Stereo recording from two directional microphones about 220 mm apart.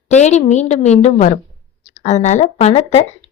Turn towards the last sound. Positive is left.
turn(degrees=30)  # may be behind; listen again after turning